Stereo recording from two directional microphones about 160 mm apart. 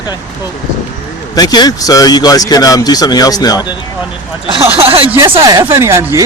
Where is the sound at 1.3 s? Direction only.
25° left (ahead or behind).